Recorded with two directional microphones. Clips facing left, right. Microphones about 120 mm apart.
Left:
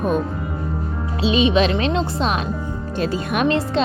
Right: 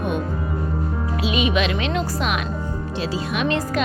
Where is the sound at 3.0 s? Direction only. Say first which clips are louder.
Left 4 dB; 50° left (ahead or behind).